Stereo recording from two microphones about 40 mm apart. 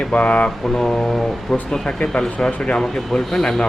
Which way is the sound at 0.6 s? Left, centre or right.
Centre.